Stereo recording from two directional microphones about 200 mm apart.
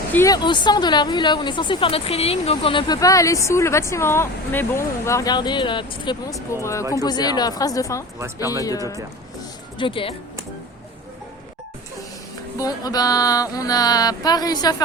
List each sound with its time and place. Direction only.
0.1 s speech: 15° left (ahead or behind)
12.5 s speech: 20° left (ahead or behind)